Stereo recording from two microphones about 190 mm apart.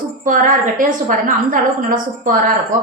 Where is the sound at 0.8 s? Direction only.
45° right (ahead or behind).